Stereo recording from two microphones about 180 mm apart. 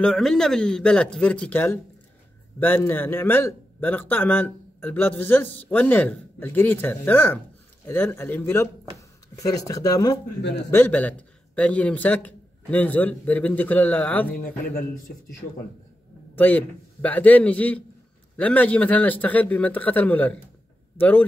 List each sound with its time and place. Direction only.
0.0 s a man's voice: centre (ahead or behind)
16.3 s a man's voice: 10° left (ahead or behind)